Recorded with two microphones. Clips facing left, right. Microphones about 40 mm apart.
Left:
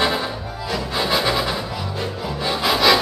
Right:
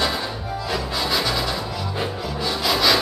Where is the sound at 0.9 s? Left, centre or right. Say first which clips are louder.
Left 5 dB; centre.